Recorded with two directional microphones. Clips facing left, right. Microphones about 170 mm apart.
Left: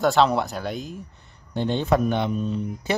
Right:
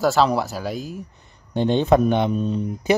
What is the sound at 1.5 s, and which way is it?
Speech, 20° right (ahead or behind).